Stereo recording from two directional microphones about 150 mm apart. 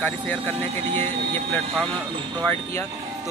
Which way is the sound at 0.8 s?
50° right (ahead or behind).